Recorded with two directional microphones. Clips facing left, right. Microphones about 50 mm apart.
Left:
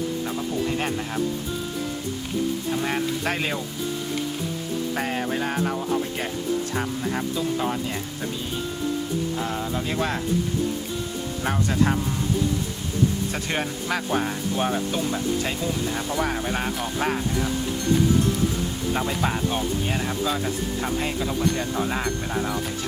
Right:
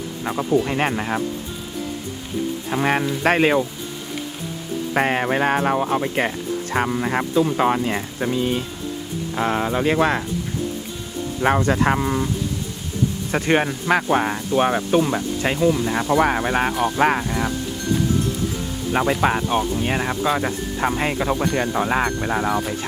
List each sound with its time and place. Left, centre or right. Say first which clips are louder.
0.3 s speech: right 6 dB; right
2.6 s speech: right 5 dB; right
4.9 s speech: right 10 dB; right
11.4 s speech: right 6 dB; right
13.3 s speech: right 8 dB; right
19.2 s speech: right 5 dB; right